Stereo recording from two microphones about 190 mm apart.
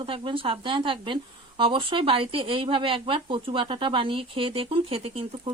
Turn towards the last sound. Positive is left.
turn(degrees=-30)  # may be behind; listen again after turning